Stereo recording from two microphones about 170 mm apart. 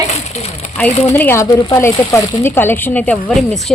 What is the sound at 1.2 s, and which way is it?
A woman's voice, 15° left (ahead or behind).